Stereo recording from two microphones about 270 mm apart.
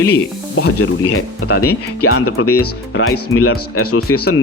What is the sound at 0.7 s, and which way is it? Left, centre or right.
Speech, left.